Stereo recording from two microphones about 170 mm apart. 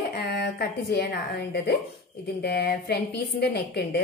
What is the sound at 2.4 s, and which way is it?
A woman's voice, 70° left (ahead or behind).